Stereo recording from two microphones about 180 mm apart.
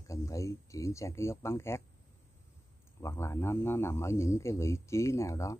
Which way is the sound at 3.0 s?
15° left (ahead or behind).